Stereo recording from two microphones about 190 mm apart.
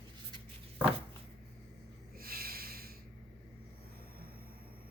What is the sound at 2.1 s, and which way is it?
Snort, 50° right (ahead or behind).